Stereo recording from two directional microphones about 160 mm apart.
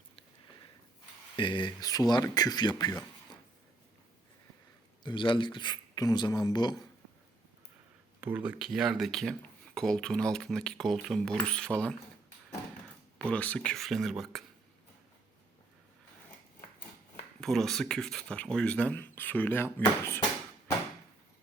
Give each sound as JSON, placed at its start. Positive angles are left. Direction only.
{"t": 1.4, "sound": "speech", "side_deg": 30}
{"t": 5.0, "sound": "speech", "side_deg": 30}
{"t": 8.2, "sound": "speech", "side_deg": -10}
{"t": 13.1, "sound": "speech", "side_deg": 10}
{"t": 17.4, "sound": "speech", "side_deg": 0}